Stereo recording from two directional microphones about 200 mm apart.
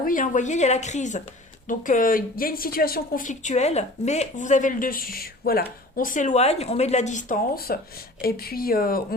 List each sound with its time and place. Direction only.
0.0 s speech: 40° left (ahead or behind)